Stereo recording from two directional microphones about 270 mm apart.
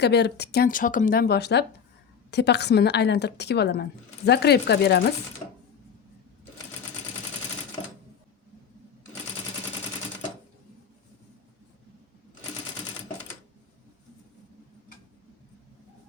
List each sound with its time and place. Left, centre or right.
0.0 s speech: left